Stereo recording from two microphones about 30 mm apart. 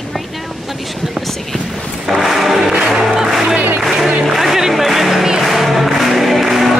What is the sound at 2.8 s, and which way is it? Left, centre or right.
Music, right.